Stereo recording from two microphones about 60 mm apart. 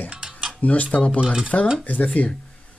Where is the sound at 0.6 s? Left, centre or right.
Left.